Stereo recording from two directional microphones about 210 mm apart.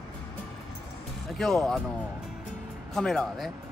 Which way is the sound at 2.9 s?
Centre (ahead or behind).